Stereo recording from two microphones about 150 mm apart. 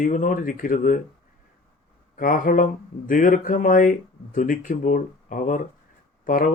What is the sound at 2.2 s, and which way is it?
Speech, 65° left (ahead or behind).